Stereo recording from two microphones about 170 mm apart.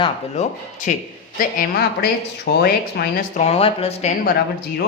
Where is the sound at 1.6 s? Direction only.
65° left (ahead or behind).